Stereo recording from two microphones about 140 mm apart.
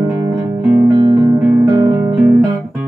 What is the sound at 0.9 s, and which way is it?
Music, 30° right (ahead or behind).